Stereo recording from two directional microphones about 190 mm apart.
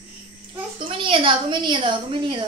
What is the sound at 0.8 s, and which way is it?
A woman's voice, 30° right (ahead or behind).